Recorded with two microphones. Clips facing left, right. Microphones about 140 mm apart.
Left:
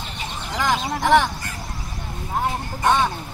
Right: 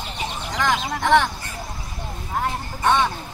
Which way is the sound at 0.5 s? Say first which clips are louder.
Left 1 dB; 5° left (ahead or behind).